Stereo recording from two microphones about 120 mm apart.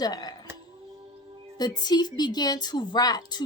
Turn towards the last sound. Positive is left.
turn(degrees=35)  # may be behind; listen again after turning